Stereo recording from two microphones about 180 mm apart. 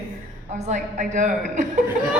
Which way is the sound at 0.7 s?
45° right (ahead or behind).